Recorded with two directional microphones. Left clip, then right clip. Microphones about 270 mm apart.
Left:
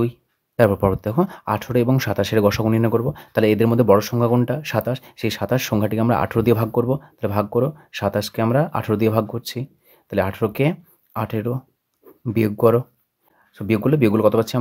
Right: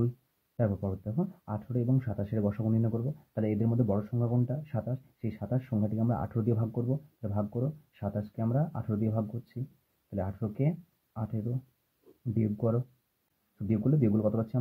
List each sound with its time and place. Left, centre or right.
0.6 s speech: left
12.4 s speech: left